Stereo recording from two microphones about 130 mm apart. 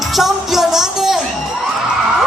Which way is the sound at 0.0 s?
Centre (ahead or behind).